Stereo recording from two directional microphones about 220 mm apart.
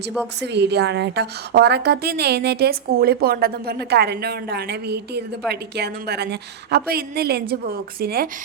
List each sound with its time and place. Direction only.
0.4 s a woman's voice: 50° right (ahead or behind)